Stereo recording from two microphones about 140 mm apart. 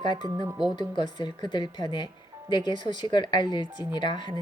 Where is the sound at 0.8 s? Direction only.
35° left (ahead or behind).